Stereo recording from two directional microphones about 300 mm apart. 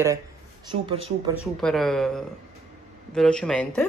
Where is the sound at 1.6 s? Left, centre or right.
Centre.